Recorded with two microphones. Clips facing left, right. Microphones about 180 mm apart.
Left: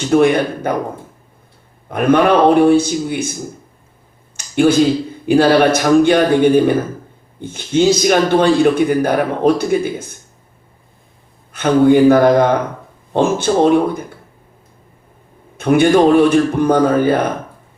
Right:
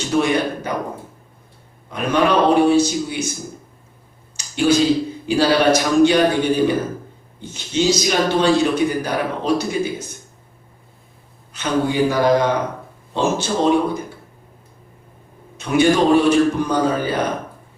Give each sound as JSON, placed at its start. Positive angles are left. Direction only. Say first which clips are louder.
{"t": 0.1, "sound": "a man's voice", "louder": "left 6 dB", "side_deg": 55}
{"t": 1.9, "sound": "a man's voice", "louder": "left 6 dB", "side_deg": 55}
{"t": 4.4, "sound": "a sound", "louder": "left 6 dB", "side_deg": 55}
{"t": 5.2, "sound": "a man's voice", "louder": "left 6 dB", "side_deg": 55}
{"t": 11.5, "sound": "a man's voice", "louder": "left 9 dB", "side_deg": 55}
{"t": 15.5, "sound": "a man's voice", "louder": "left 5 dB", "side_deg": 55}